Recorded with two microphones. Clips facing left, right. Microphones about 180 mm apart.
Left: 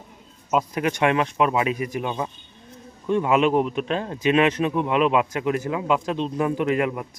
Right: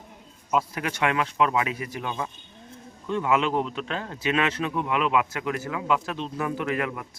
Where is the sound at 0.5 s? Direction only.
20° left (ahead or behind).